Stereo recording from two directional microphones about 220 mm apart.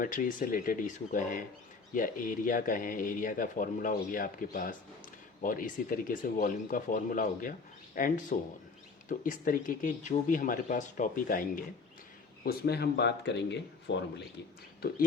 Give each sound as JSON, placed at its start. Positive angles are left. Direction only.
{"t": 0.0, "sound": "speech", "side_deg": 40}